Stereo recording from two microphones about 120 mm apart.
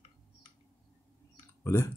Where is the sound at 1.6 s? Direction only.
25° left (ahead or behind).